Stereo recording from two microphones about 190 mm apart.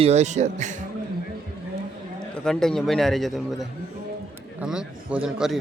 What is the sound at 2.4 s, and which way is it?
Speech, 5° left (ahead or behind).